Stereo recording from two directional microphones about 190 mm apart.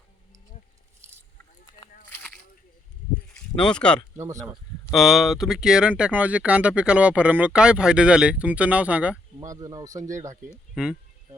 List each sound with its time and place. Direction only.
2.0 s a sound: 10° left (ahead or behind)
3.3 s speech: 5° left (ahead or behind)
4.2 s speech: 15° right (ahead or behind)
4.9 s speech: centre (ahead or behind)
9.4 s speech: 20° right (ahead or behind)
10.8 s speech: 5° right (ahead or behind)